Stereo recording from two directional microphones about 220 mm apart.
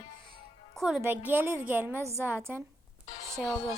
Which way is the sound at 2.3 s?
5° right (ahead or behind).